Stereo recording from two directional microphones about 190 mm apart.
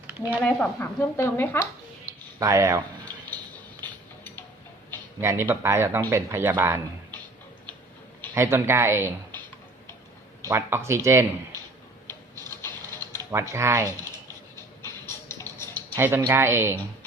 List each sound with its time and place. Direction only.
0.1 s a sound: 10° right (ahead or behind)
0.6 s a woman's voice: 10° left (ahead or behind)
2.4 s speech: 15° right (ahead or behind)
3.8 s tick-tock: 10° left (ahead or behind)
5.2 s speech: 15° right (ahead or behind)
8.4 s speech: 15° right (ahead or behind)
10.5 s speech: 15° right (ahead or behind)
12.0 s printer: 15° left (ahead or behind)
13.5 s speech: 15° right (ahead or behind)
14.5 s music: 15° left (ahead or behind)
16.0 s speech: 10° right (ahead or behind)